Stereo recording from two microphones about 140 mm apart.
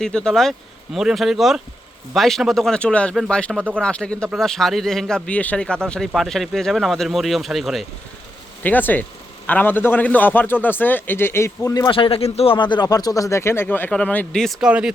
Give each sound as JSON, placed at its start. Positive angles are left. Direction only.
{"t": 0.0, "sound": "a man's voice", "side_deg": 5}
{"t": 8.6, "sound": "a man's voice", "side_deg": 10}
{"t": 11.9, "sound": "speech", "side_deg": 40}